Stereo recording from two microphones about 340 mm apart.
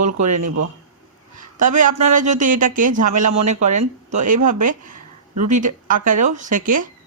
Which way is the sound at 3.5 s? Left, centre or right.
Right.